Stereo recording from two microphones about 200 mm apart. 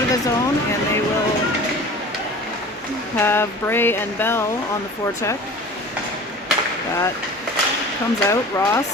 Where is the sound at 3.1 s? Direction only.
10° left (ahead or behind).